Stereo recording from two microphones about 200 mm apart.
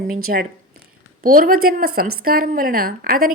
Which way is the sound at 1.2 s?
45° right (ahead or behind).